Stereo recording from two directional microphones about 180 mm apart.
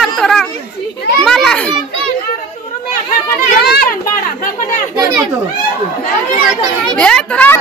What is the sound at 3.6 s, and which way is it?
Speech, 60° left (ahead or behind).